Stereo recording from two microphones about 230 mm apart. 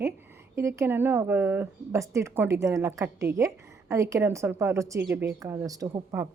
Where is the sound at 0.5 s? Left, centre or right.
Centre.